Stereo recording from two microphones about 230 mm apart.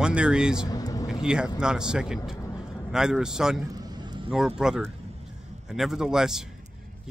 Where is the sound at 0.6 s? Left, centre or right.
Centre.